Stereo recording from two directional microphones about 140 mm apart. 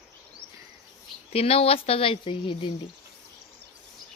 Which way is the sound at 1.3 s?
45° left (ahead or behind).